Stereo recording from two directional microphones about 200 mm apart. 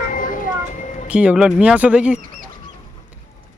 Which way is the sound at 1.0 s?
5° right (ahead or behind).